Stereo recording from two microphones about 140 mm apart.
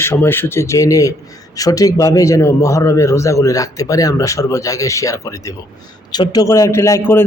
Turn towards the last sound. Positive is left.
turn(degrees=20)  # may be behind; listen again after turning